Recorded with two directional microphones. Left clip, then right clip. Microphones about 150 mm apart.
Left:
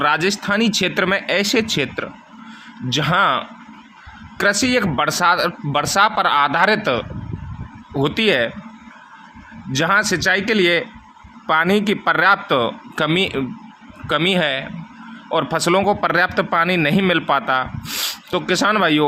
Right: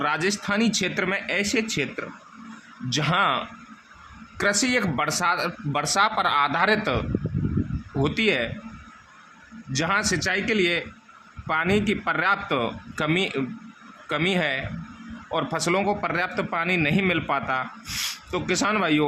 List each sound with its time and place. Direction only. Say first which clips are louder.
0.0 s speech: left 7 dB; 20° left (ahead or behind)
2.9 s speech: left 6 dB; 15° left (ahead or behind)
9.7 s speech: left 7 dB; 20° left (ahead or behind)